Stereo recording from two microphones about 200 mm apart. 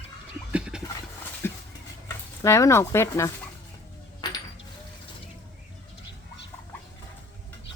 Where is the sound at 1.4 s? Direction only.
10° left (ahead or behind).